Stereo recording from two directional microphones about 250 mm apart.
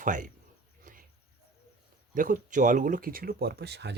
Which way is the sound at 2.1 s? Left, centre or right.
Right.